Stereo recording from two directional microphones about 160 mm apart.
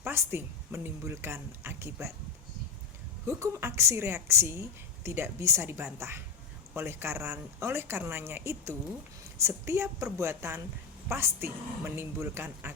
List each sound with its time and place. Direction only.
0.0 s a woman's voice: 15° right (ahead or behind)
3.2 s a woman's voice: 20° right (ahead or behind)